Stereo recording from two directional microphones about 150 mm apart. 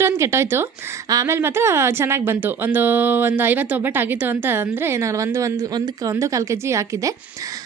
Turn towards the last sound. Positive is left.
turn(degrees=-20)  # may be behind; listen again after turning